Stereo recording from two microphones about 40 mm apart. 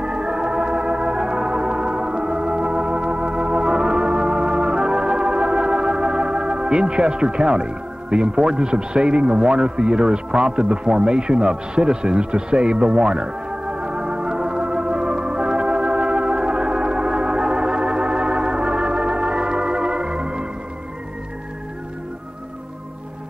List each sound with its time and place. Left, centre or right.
0.0 s music: right